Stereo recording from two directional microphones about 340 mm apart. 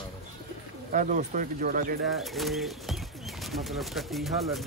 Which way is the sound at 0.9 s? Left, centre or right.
Right.